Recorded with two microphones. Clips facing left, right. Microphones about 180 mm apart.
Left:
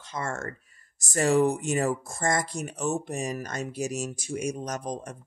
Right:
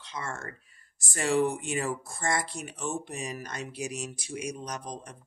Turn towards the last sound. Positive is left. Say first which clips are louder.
# left 5 dB
turn(degrees=45)  # may be behind; listen again after turning